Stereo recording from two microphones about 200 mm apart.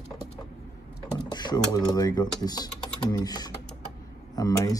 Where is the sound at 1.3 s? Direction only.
20° left (ahead or behind).